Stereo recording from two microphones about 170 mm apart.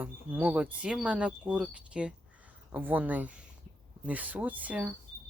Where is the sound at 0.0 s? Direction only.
10° right (ahead or behind).